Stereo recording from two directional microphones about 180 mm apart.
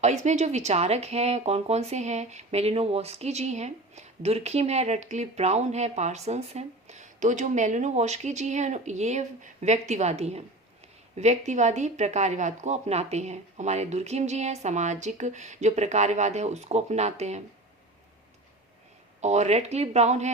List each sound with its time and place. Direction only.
0.0 s speech: 40° right (ahead or behind)
19.2 s speech: 40° right (ahead or behind)